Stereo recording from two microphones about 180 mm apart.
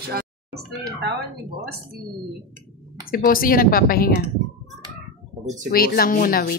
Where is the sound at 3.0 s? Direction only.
50° left (ahead or behind).